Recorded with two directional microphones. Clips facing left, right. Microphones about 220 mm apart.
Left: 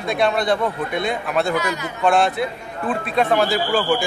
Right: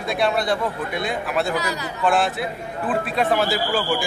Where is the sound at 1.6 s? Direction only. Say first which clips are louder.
Left 2 dB; 35° right (ahead or behind).